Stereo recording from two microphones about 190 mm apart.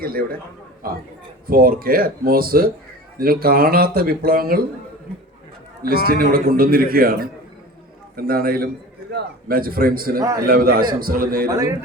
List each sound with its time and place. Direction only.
0.0 s a man's voice: 50° right (ahead or behind)
5.8 s a man's voice: 55° right (ahead or behind)
10.2 s a man's voice: 15° right (ahead or behind)
10.4 s a man's voice: 50° right (ahead or behind)
11.4 s a man's voice: 15° right (ahead or behind)